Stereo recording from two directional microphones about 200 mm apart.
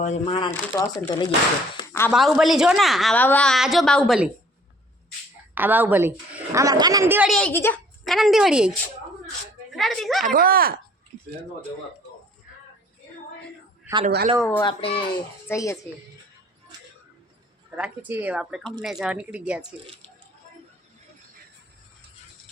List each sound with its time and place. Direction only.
0.0 s speech: 30° left (ahead or behind)
1.9 s a sound: 10° left (ahead or behind)
2.1 s a woman's voice: centre (ahead or behind)
5.5 s speech: 10° right (ahead or behind)
7.3 s a woman's voice: 5° left (ahead or behind)
8.0 s a woman's voice: centre (ahead or behind)
10.2 s speech: 45° right (ahead or behind)
13.9 s a sound: 10° right (ahead or behind)
14.6 s speech: 25° left (ahead or behind)
15.4 s a woman's voice: 15° left (ahead or behind)
17.7 s a woman's voice: 5° right (ahead or behind)